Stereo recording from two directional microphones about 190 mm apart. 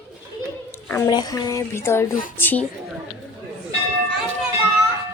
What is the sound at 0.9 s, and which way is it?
Speech, 15° left (ahead or behind).